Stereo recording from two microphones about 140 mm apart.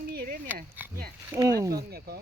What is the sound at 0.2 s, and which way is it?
Oink, 90° right.